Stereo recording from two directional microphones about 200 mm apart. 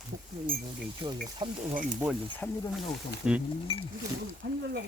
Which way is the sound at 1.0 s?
25° right (ahead or behind).